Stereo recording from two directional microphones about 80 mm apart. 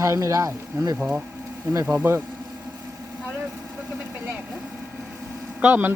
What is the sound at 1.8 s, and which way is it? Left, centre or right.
Speech, right.